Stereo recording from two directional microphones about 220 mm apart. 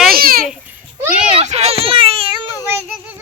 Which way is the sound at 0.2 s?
40° right (ahead or behind).